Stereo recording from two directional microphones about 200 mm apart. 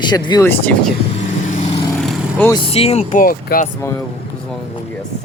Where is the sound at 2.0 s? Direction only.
10° left (ahead or behind).